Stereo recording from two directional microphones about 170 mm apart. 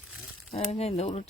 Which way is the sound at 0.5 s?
35° left (ahead or behind).